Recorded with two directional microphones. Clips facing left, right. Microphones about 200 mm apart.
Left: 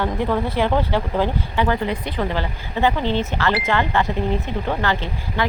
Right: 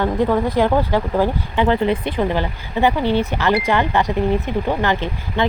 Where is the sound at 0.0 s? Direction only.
15° right (ahead or behind).